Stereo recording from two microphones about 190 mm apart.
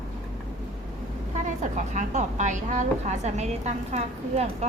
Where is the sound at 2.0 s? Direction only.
40° right (ahead or behind).